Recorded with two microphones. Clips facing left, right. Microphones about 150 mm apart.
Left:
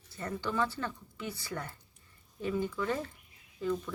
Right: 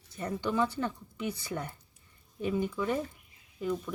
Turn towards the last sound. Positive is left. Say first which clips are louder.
# even
turn(degrees=-15)  # may be behind; listen again after turning